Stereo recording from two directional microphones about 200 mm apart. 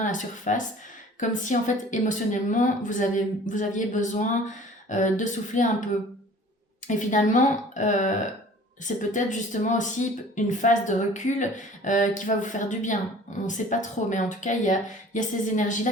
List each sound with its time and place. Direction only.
0.0 s a woman's voice: 40° left (ahead or behind)
6.8 s a woman's voice: 40° left (ahead or behind)